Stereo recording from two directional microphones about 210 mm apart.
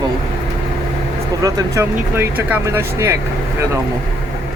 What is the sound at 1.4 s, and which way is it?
Speech, 15° right (ahead or behind).